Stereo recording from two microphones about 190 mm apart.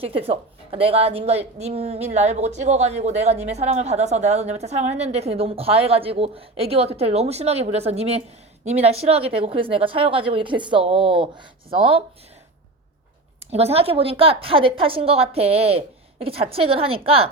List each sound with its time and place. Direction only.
0.0 s a woman's voice: 30° right (ahead or behind)
13.5 s a woman's voice: 35° right (ahead or behind)